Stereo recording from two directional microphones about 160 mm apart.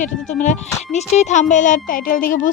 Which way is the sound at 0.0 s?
50° left (ahead or behind).